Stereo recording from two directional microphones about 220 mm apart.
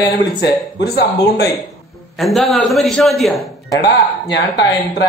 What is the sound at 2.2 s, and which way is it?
Speech, centre (ahead or behind).